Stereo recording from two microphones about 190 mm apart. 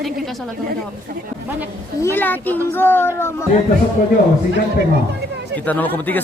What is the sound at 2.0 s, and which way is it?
Speech, 10° left (ahead or behind).